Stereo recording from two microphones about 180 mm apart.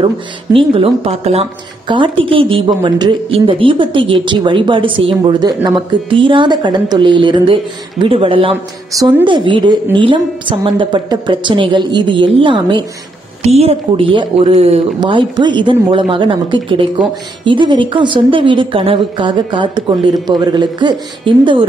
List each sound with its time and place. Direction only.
0.0 s speech: 30° right (ahead or behind)